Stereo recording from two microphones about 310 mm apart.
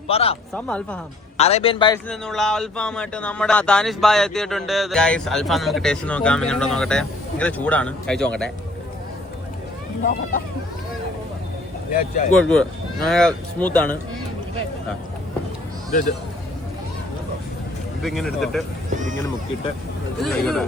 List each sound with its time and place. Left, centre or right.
0.1 s speech: centre
0.5 s speech: centre
1.4 s a man's voice: centre
2.0 s speech: centre
11.9 s speech: left
12.3 s speech: centre
15.9 s speech: left
18.0 s speech: centre
20.1 s speech: centre